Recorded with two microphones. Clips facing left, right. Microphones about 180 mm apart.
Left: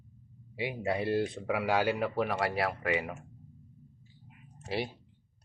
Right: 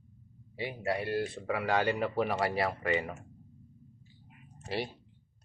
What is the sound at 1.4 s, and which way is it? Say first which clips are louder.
Speech: right 1 dB; 5° left (ahead or behind).